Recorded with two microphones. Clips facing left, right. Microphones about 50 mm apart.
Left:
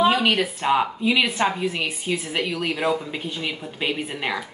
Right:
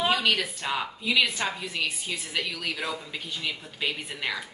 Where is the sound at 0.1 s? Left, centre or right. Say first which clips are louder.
Left 4 dB; left.